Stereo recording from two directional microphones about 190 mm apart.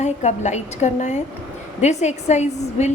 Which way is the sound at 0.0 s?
35° left (ahead or behind).